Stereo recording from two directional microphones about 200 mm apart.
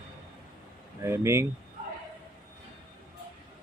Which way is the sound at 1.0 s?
15° right (ahead or behind).